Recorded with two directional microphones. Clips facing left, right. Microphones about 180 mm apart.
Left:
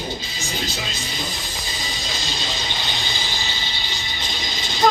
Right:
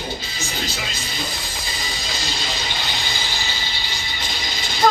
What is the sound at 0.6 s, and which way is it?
Speech, 20° left (ahead or behind).